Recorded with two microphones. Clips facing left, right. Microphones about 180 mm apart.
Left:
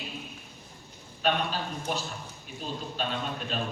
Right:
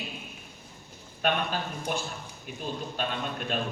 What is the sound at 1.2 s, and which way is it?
Speech, 50° right (ahead or behind).